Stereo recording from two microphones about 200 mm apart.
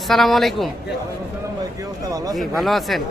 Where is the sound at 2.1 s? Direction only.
20° right (ahead or behind).